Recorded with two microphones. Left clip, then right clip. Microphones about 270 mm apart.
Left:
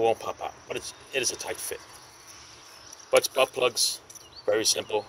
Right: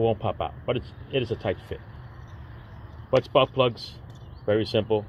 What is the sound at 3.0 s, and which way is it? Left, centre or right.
Speech, centre.